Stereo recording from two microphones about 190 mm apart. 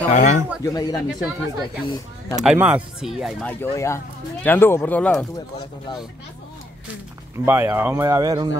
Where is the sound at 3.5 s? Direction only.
10° left (ahead or behind).